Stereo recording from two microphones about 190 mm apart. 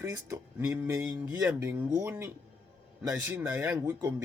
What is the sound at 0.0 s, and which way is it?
Speech, 15° right (ahead or behind).